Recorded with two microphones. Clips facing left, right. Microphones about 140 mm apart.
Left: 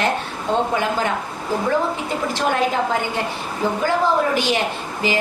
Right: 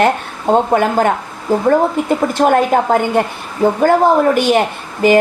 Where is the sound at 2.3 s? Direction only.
50° right (ahead or behind).